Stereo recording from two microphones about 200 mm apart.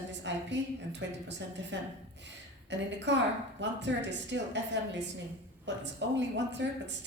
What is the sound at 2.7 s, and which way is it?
Speech, 60° right (ahead or behind).